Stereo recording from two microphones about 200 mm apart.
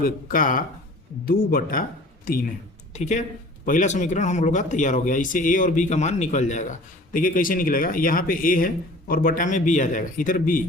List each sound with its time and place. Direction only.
0.0 s speech: 45° left (ahead or behind)
2.9 s speech: 35° left (ahead or behind)